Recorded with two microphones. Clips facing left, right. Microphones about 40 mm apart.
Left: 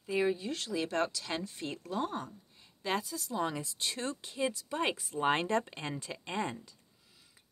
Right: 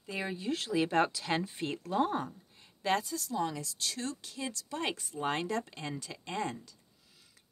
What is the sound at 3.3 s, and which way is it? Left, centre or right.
Speech, centre.